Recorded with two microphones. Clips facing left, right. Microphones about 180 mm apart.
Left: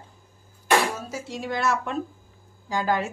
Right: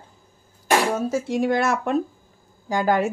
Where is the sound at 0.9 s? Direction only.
55° right (ahead or behind).